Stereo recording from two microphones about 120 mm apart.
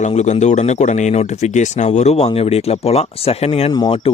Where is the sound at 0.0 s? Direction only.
70° left (ahead or behind).